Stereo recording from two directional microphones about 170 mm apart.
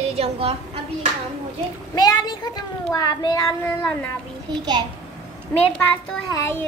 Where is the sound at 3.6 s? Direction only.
10° left (ahead or behind).